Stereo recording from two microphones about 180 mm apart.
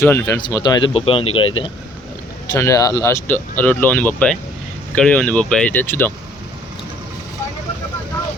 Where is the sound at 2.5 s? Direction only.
15° left (ahead or behind).